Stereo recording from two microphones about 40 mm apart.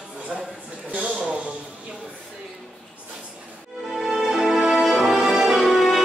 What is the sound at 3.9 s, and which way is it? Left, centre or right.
Music, centre.